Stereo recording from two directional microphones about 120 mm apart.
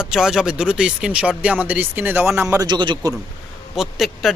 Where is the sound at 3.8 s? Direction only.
Centre (ahead or behind).